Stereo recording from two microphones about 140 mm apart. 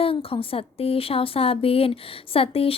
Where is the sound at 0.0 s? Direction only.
40° left (ahead or behind).